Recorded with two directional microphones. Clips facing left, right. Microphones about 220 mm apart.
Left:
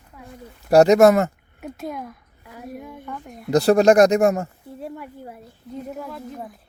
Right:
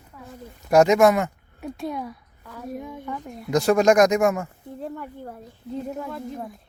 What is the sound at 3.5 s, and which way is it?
Speech, 35° left (ahead or behind).